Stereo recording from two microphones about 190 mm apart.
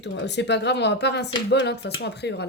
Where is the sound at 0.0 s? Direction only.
65° left (ahead or behind).